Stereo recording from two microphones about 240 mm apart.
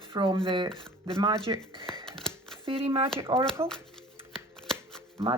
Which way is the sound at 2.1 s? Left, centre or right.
Centre.